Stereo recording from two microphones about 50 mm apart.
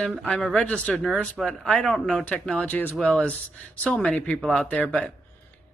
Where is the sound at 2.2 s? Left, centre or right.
Left.